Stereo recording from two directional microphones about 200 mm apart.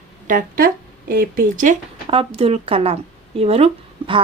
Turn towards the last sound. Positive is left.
turn(degrees=-30)  # may be behind; listen again after turning